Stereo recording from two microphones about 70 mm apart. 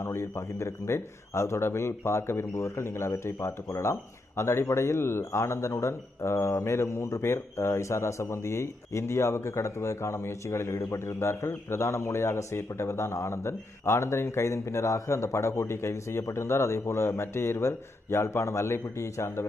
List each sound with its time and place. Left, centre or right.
0.0 s a man's voice: left